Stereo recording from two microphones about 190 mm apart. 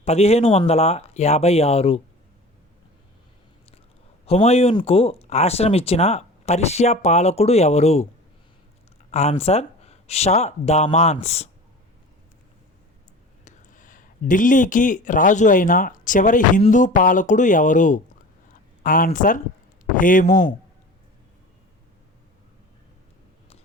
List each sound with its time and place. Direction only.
0.0 s speech: 35° left (ahead or behind)
4.3 s speech: 35° left (ahead or behind)
9.1 s speech: 35° left (ahead or behind)
13.4 s speech: 45° left (ahead or behind)